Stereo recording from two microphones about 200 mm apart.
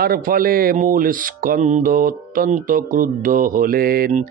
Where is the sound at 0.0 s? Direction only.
45° right (ahead or behind).